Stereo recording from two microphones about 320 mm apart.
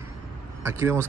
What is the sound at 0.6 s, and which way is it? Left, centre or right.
Speech, centre.